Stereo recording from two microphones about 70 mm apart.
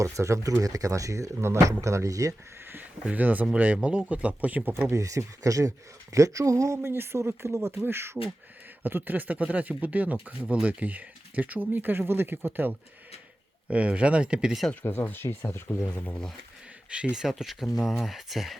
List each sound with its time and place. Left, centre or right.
0.0 s speech: right
3.0 s speech: right
4.9 s speech: right
13.7 s speech: centre
14.8 s speech: left
16.9 s speech: centre